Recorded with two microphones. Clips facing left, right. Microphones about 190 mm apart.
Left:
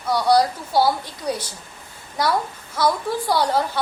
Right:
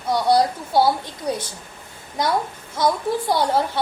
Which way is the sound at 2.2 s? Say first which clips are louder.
Even; 20° right (ahead or behind).